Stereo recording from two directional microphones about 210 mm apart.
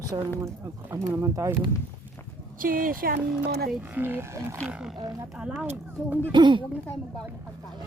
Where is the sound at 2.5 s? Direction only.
40° right (ahead or behind).